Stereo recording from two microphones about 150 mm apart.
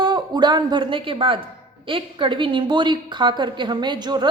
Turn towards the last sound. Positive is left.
turn(degrees=-30)  # may be behind; listen again after turning